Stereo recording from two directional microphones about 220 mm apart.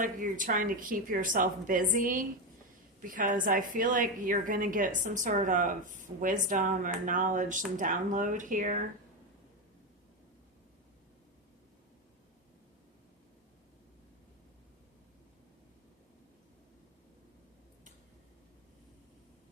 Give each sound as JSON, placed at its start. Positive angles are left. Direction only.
{"t": 0.0, "sound": "a woman's voice", "side_deg": -35}